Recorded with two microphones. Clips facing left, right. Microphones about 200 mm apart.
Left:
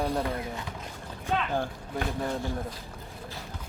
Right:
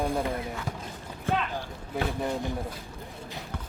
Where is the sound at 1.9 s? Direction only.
15° right (ahead or behind).